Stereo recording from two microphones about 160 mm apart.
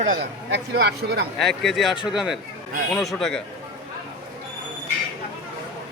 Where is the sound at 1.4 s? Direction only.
Centre (ahead or behind).